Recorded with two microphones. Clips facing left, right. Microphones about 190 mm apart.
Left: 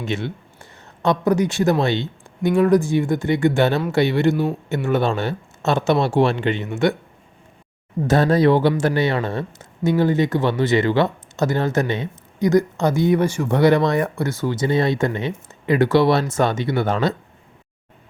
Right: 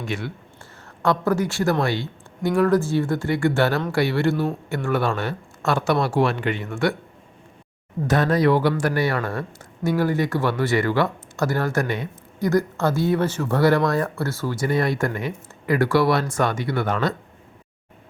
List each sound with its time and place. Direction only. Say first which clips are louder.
0.0 s speech: left 4 dB; 25° left (ahead or behind)
8.0 s speech: left 3 dB; 30° left (ahead or behind)